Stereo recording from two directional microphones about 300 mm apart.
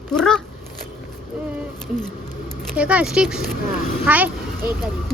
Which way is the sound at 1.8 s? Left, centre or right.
Centre.